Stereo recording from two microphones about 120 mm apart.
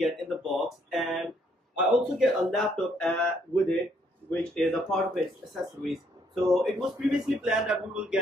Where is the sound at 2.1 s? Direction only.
Centre (ahead or behind).